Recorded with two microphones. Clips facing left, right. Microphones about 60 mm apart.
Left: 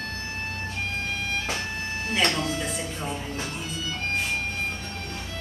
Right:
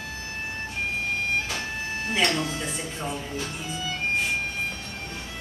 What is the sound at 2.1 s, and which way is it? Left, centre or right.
Speech, centre.